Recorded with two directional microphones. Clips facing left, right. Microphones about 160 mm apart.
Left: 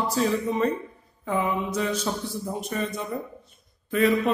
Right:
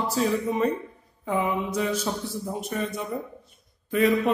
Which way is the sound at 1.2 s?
15° right (ahead or behind).